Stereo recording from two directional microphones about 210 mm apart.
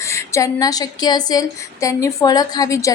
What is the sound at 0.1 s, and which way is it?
A woman's voice, 15° left (ahead or behind).